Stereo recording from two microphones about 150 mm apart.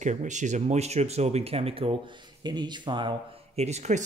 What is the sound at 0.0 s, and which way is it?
Speech, 55° right (ahead or behind).